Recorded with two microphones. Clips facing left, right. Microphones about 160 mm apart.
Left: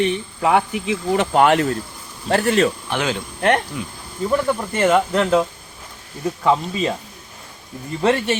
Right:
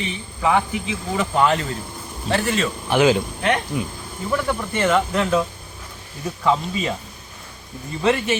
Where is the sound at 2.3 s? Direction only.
55° left (ahead or behind).